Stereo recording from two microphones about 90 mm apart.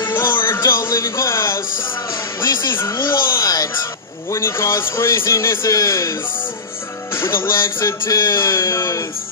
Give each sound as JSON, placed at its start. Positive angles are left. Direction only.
{"t": 0.0, "sound": "a sound", "side_deg": 25}
{"t": 2.4, "sound": "music", "side_deg": 50}
{"t": 2.9, "sound": "speech", "side_deg": 50}